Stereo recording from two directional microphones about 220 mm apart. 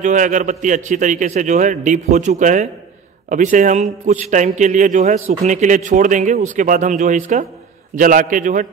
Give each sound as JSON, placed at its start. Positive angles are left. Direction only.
{"t": 0.0, "sound": "a man's voice", "side_deg": -35}